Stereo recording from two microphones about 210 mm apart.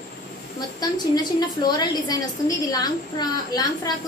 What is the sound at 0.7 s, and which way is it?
A woman's voice, 20° left (ahead or behind).